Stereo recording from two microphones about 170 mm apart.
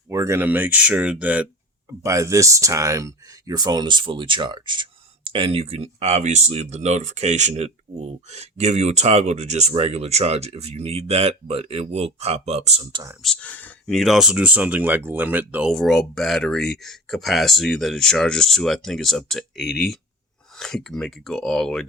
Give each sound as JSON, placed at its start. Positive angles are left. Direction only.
{"t": 0.1, "sound": "speech", "side_deg": -15}
{"t": 13.2, "sound": "speech", "side_deg": 5}
{"t": 15.7, "sound": "speech", "side_deg": 0}